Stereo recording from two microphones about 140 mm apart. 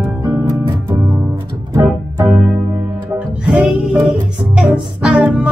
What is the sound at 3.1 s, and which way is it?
Music, centre (ahead or behind).